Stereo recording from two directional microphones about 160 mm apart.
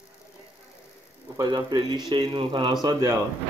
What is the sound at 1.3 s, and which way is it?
Speech, 25° right (ahead or behind).